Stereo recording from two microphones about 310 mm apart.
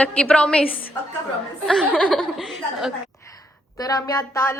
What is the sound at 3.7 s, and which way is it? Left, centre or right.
Speech, centre.